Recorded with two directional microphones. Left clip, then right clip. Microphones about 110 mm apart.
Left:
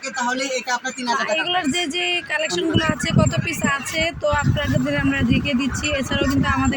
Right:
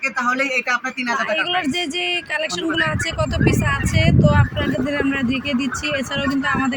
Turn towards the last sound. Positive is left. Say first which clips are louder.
# even
turn(degrees=0)  # may be behind; listen again after turning